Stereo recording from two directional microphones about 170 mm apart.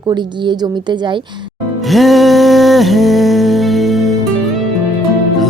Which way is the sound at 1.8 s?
Centre (ahead or behind).